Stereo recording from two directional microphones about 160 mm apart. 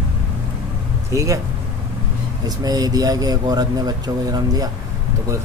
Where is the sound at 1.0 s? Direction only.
20° right (ahead or behind).